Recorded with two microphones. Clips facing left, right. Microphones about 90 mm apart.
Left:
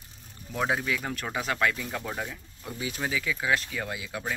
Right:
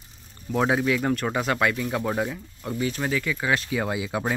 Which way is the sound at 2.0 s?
15° right (ahead or behind).